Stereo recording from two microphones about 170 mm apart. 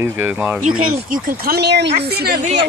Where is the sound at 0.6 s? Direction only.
50° right (ahead or behind).